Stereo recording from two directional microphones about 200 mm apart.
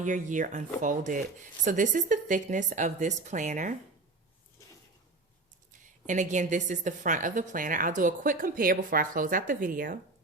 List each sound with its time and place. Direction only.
0.0 s a woman's voice: 40° right (ahead or behind)
5.8 s a woman's voice: 40° right (ahead or behind)